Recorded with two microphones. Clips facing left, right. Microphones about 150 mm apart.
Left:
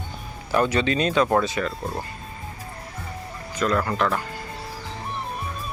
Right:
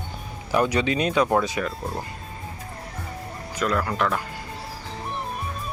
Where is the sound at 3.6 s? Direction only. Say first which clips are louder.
Left 1 dB; 5° right (ahead or behind).